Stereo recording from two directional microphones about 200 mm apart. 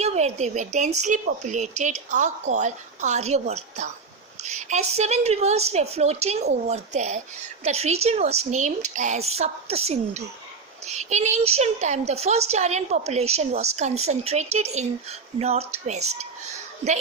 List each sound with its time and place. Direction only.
0.0 s a woman's voice: 35° right (ahead or behind)